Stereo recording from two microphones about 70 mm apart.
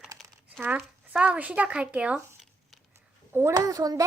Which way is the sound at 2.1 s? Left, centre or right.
Centre.